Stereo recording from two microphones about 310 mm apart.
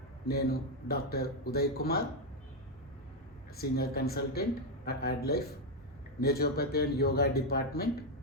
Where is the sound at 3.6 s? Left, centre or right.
Left.